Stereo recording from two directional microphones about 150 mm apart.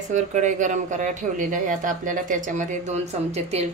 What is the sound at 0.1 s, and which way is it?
Speech, 55° right (ahead or behind).